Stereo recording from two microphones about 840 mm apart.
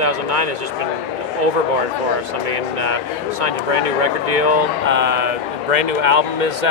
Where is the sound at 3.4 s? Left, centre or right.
Right.